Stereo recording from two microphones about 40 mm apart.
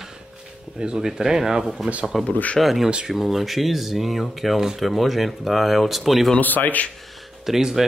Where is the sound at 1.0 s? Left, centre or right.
Centre.